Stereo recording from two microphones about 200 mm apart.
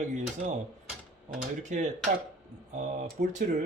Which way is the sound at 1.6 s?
35° right (ahead or behind).